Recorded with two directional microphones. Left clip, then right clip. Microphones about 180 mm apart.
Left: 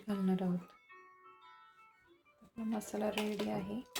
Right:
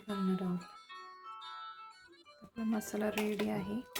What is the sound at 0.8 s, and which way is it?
Music, 30° right (ahead or behind).